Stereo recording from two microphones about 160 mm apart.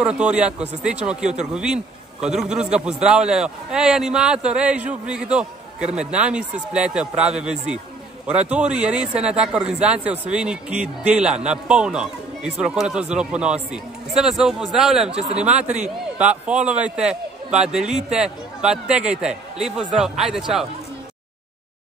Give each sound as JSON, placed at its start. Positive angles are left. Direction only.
{"t": 0.0, "sound": "a man's voice", "side_deg": -5}
{"t": 15.1, "sound": "speech", "side_deg": -40}
{"t": 15.4, "sound": "a man's voice", "side_deg": -10}